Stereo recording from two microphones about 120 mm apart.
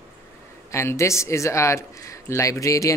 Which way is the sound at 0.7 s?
25° left (ahead or behind).